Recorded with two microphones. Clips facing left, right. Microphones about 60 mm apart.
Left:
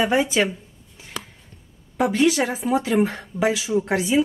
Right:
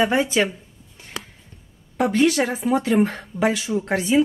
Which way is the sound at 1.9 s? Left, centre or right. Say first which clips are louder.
Right 1 dB; centre.